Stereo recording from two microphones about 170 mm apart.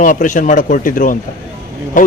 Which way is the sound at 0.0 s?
50° left (ahead or behind).